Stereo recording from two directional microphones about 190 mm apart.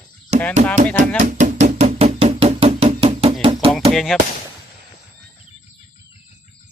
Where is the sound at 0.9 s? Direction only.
40° right (ahead or behind).